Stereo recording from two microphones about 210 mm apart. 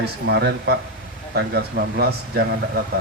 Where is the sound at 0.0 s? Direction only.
50° right (ahead or behind).